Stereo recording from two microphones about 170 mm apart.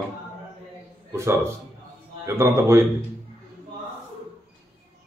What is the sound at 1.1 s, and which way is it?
A man's voice, 15° right (ahead or behind).